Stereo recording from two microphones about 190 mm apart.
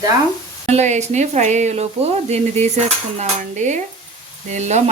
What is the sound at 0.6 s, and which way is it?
Speech, 35° right (ahead or behind).